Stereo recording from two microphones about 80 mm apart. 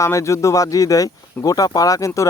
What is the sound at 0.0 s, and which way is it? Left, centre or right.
Speech, left.